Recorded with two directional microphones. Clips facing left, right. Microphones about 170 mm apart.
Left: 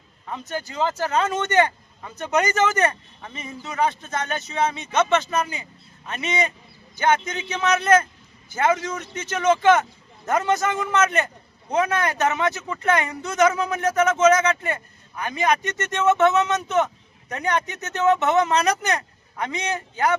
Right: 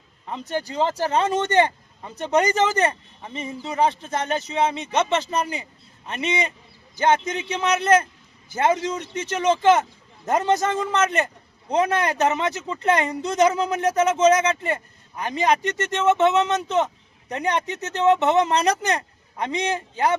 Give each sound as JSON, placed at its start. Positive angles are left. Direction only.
{"t": 0.3, "sound": "speech", "side_deg": -30}